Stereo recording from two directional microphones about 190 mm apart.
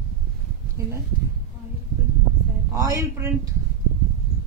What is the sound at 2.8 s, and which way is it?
Speech, 15° right (ahead or behind).